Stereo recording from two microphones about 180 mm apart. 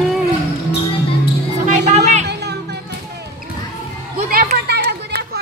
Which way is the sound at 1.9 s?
40° right (ahead or behind).